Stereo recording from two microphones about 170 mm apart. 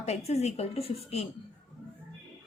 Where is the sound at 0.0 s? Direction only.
40° left (ahead or behind).